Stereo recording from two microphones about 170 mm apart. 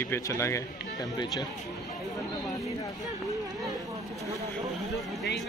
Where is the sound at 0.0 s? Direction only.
15° left (ahead or behind).